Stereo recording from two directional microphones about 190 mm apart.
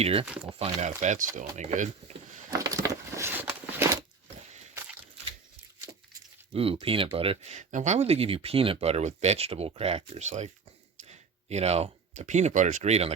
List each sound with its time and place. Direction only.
0.0 s speech: 30° right (ahead or behind)
2.6 s a sound: 15° right (ahead or behind)
6.5 s speech: 30° right (ahead or behind)